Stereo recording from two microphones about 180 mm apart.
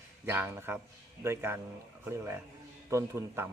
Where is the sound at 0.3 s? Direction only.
10° right (ahead or behind).